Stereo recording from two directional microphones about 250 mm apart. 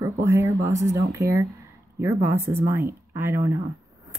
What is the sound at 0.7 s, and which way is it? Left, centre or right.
Speech, right.